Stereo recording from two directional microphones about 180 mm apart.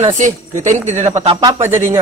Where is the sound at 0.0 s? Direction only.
45° right (ahead or behind).